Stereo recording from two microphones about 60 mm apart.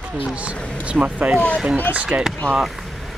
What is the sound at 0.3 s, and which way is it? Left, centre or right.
Speech, right.